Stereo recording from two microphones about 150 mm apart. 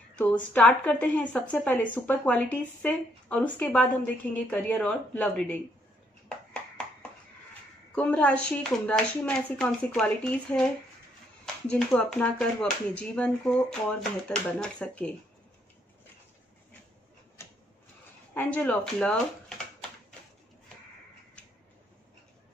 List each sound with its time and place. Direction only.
0.2 s a woman's voice: 10° left (ahead or behind)
7.9 s a woman's voice: 10° left (ahead or behind)
11.7 s a woman's voice: 5° left (ahead or behind)
17.4 s a sound: 15° left (ahead or behind)
18.3 s a woman's voice: 10° left (ahead or behind)